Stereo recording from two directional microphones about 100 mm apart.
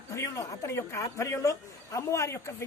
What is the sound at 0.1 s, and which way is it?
Speech, 30° left (ahead or behind).